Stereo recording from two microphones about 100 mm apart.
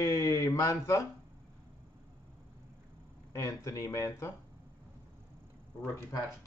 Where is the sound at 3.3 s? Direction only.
30° left (ahead or behind).